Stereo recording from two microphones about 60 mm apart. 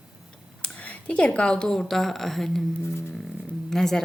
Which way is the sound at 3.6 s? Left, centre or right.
Centre.